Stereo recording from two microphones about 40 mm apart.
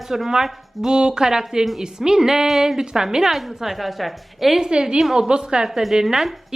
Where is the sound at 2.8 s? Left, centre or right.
Centre.